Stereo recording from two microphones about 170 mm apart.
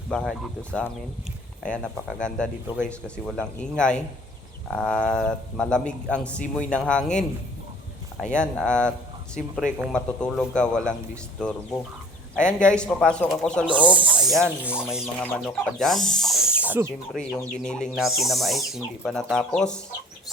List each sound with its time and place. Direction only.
0.1 s speech: 5° left (ahead or behind)
9.9 s speech: 5° left (ahead or behind)
13.8 s snake: 30° right (ahead or behind)
14.3 s speech: centre (ahead or behind)
15.2 s speech: 5° left (ahead or behind); by 16.9 s 10° right (ahead or behind)
17.2 s speech: 5° left (ahead or behind)